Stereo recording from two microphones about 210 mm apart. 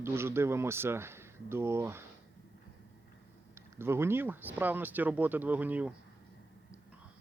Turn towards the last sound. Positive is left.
turn(degrees=-10)  # may be behind; listen again after turning